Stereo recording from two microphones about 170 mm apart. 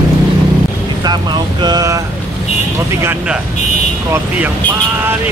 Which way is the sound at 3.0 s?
5° right (ahead or behind).